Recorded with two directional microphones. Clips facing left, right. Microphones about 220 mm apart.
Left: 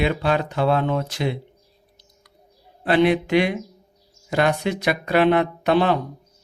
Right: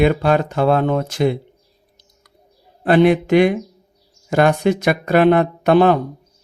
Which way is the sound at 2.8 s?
50° right (ahead or behind).